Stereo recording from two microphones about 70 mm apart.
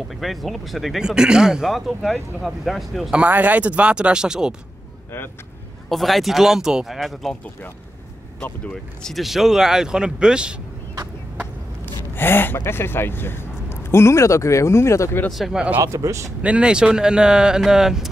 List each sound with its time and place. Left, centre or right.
0.1 s speech: centre
3.3 s speech: right
5.9 s speech: centre
7.0 s speech: centre
9.0 s speech: centre
11.8 s speech: left
15.3 s speech: centre
15.8 s speech: right
16.4 s speech: centre